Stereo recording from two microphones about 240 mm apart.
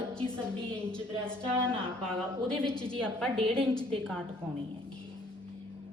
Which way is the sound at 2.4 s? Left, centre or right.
Centre.